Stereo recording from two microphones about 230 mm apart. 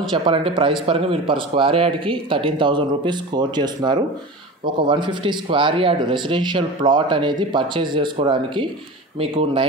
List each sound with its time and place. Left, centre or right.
0.1 s speech: right